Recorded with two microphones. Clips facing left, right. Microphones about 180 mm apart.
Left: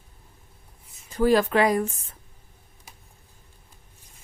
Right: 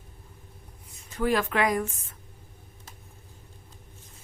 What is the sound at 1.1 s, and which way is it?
Speech, 35° left (ahead or behind).